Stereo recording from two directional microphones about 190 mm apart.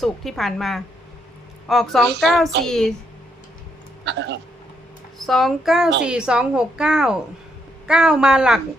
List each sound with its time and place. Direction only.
0.0 s a woman's voice: centre (ahead or behind)
4.0 s speech: 65° right (ahead or behind)
5.2 s a woman's voice: centre (ahead or behind)